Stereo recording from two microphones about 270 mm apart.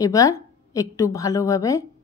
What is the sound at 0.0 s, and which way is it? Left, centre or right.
A woman's voice, centre.